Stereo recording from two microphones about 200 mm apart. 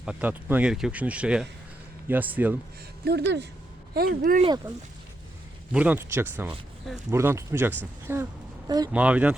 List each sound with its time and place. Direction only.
0.0 s speech: 5° right (ahead or behind)
3.0 s speech: 55° right (ahead or behind)
4.4 s speech: 20° right (ahead or behind)
5.7 s a woman's voice: 5° right (ahead or behind)
8.9 s speech: 5° right (ahead or behind)